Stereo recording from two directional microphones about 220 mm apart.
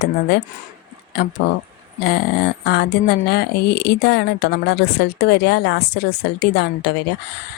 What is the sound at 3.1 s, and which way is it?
A woman's voice, 45° left (ahead or behind).